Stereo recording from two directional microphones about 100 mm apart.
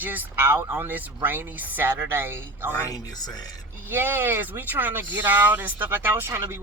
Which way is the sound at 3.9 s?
20° right (ahead or behind).